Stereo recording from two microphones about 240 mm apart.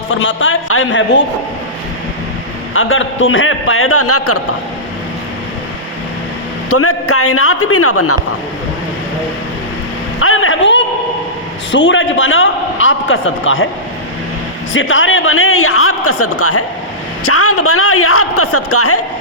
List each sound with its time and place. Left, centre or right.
0.2 s a man's voice: left
2.7 s a man's voice: left
6.7 s a man's voice: left
10.2 s a sound: left
11.7 s a man's voice: left
14.7 s a man's voice: left